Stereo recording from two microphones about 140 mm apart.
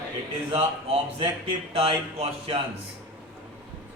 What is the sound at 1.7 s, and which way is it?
Speech, 45° right (ahead or behind).